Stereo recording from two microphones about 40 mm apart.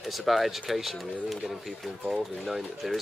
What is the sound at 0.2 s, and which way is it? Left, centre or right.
Speech, centre.